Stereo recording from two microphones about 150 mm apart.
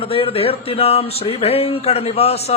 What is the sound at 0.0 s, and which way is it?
Speech, 35° left (ahead or behind).